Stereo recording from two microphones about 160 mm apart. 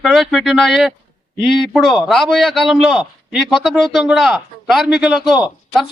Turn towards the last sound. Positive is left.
turn(degrees=0)  # may be behind; listen again after turning